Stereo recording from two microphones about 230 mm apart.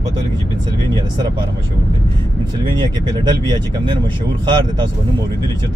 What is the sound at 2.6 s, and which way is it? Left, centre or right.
Speech, centre.